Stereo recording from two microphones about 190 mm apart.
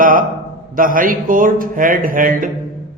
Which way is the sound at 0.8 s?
45° right (ahead or behind).